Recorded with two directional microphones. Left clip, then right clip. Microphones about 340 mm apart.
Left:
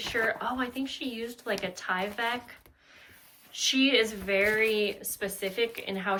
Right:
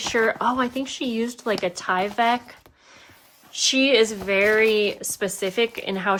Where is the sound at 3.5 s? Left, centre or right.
Centre.